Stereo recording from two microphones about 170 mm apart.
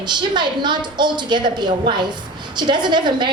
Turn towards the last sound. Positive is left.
turn(degrees=-25)  # may be behind; listen again after turning